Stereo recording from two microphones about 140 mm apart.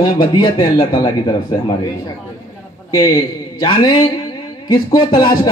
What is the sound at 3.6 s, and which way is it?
A man's voice, 30° left (ahead or behind).